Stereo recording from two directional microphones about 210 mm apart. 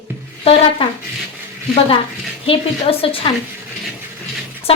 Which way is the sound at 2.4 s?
25° left (ahead or behind).